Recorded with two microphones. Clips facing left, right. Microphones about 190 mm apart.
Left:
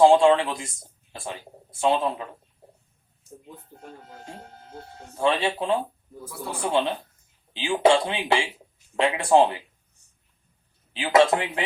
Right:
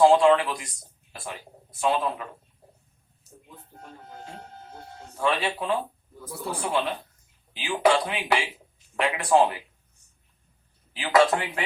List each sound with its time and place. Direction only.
0.0 s speech: 25° left (ahead or behind)
1.7 s speech: 25° left (ahead or behind)
5.1 s speech: 25° left (ahead or behind)
10.9 s speech: 25° left (ahead or behind)